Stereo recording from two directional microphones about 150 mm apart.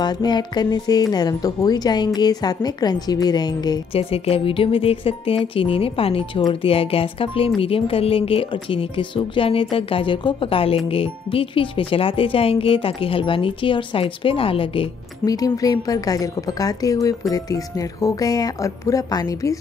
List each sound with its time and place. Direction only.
0.0 s speech: 30° left (ahead or behind)
3.9 s speech: 40° left (ahead or behind)